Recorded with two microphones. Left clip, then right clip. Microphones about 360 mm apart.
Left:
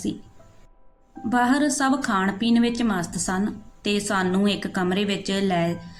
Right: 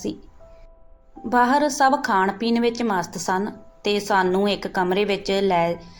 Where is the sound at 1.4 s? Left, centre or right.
Left.